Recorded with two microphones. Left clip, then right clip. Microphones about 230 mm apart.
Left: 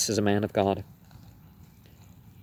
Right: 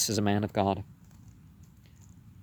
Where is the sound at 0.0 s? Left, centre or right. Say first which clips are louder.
Left 3 dB; right.